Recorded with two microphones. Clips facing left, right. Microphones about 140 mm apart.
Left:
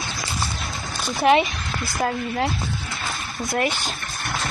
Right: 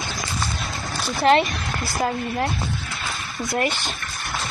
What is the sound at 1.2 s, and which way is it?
Speech, 10° left (ahead or behind).